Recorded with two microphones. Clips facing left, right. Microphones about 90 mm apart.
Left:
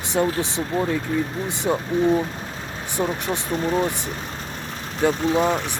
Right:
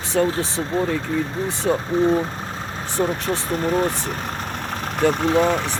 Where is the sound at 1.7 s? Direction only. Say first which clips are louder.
Right 2 dB; 15° left (ahead or behind).